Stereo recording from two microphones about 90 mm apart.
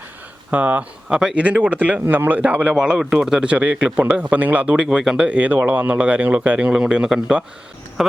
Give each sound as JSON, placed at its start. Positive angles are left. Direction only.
{"t": 0.5, "sound": "speech", "side_deg": -15}